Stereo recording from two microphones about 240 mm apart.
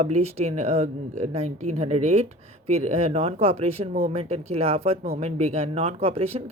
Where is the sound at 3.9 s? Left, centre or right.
Right.